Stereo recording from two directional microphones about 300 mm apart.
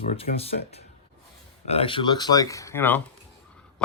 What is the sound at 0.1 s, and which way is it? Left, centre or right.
A man's voice, centre.